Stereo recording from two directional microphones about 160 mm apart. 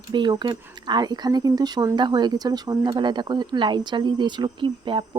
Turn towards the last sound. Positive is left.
turn(degrees=-30)  # may be behind; listen again after turning